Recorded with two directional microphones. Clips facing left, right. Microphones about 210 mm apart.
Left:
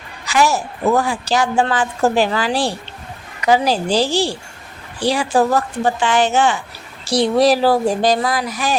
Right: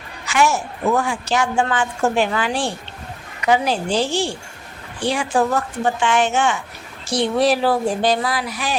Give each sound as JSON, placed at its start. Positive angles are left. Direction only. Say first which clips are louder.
{"t": 0.3, "sound": "a woman's voice", "louder": "left 2 dB", "side_deg": 35}